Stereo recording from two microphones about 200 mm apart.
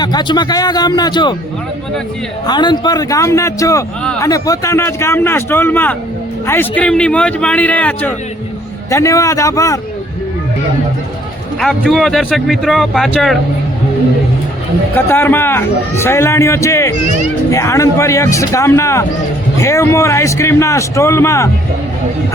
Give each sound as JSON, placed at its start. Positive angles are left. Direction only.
{"t": 0.0, "sound": "speech", "side_deg": 20}
{"t": 2.5, "sound": "a man's voice", "side_deg": 20}
{"t": 11.6, "sound": "a man's voice", "side_deg": 0}
{"t": 14.9, "sound": "a man's voice", "side_deg": 10}